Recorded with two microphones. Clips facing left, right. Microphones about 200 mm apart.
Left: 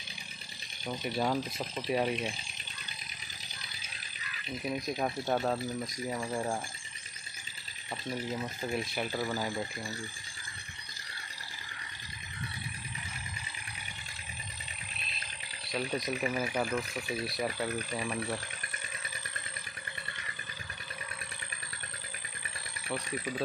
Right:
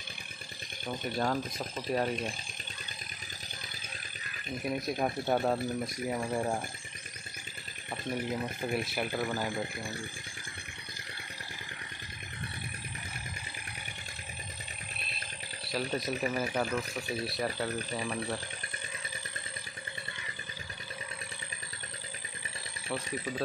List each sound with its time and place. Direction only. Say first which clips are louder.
0.8 s speech: even; 5° left (ahead or behind)
4.6 s speech: right 1 dB; 5° right (ahead or behind)
6.1 s speech: right 2 dB; 20° right (ahead or behind)
8.1 s speech: right 2 dB; 15° right (ahead or behind)
15.7 s speech: right 1 dB; centre (ahead or behind)
23.0 s speech: even; 20° right (ahead or behind)